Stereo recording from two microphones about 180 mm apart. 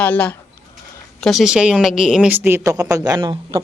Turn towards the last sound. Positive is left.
turn(degrees=-20)  # may be behind; listen again after turning